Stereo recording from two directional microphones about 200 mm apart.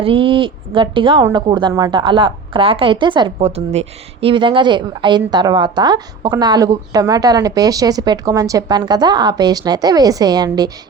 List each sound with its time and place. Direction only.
0.0 s a woman's voice: 25° right (ahead or behind)